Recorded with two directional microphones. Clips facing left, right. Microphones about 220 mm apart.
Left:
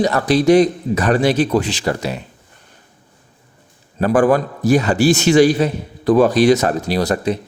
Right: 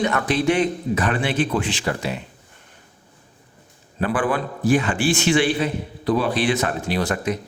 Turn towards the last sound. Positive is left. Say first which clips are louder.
# left 5 dB
turn(degrees=40)  # may be behind; listen again after turning